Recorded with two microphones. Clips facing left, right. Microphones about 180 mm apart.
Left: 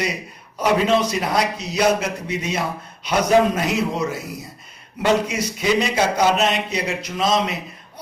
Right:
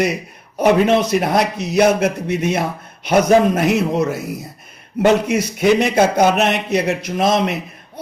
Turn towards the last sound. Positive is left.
turn(degrees=-55)  # may be behind; listen again after turning